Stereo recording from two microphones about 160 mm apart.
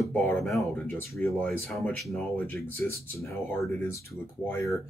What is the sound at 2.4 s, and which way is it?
Speech, 10° left (ahead or behind).